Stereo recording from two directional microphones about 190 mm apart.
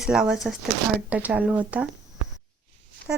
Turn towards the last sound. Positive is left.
turn(degrees=-5)  # may be behind; listen again after turning